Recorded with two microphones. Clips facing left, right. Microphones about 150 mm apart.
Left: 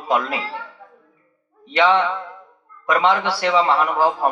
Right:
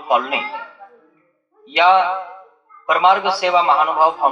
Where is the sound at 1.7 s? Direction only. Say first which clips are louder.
Right 4 dB; 20° right (ahead or behind).